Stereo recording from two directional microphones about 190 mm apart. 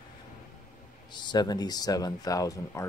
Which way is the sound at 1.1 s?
20° left (ahead or behind).